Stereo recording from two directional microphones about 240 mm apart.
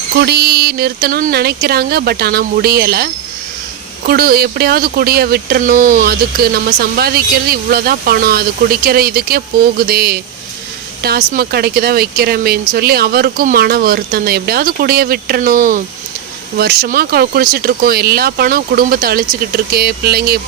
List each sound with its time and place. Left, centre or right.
0.2 s speech: right